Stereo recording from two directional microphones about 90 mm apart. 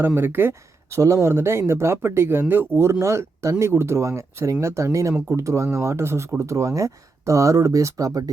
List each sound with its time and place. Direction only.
0.0 s speech: 25° right (ahead or behind)